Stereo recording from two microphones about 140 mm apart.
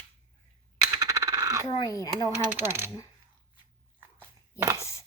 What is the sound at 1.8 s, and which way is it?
Speech, 25° left (ahead or behind).